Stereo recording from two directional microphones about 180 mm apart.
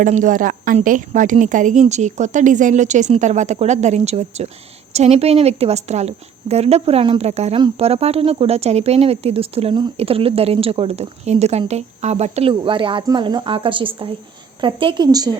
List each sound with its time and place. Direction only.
0.0 s a woman's voice: 45° right (ahead or behind); by 15.3 s 20° right (ahead or behind)